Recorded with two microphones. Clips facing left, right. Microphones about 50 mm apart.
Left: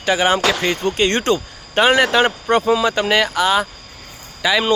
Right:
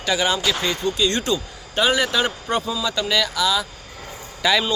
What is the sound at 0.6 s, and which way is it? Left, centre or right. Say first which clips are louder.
Speech: left 4 dB; left.